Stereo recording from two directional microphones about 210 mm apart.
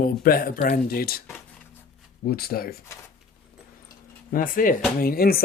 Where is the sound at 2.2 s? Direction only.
45° left (ahead or behind).